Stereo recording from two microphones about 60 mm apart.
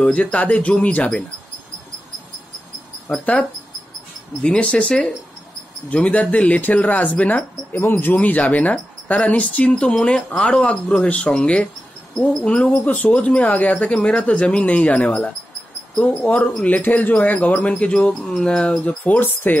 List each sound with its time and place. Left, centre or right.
0.0 s speech: left
3.1 s speech: centre
19.1 s speech: left